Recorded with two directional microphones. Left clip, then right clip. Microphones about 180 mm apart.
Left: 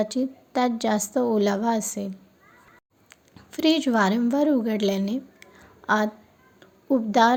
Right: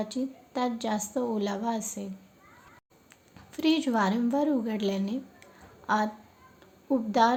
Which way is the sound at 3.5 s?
25° left (ahead or behind).